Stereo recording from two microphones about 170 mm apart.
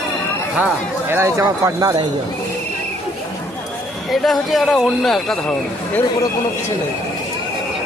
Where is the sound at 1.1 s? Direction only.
15° right (ahead or behind).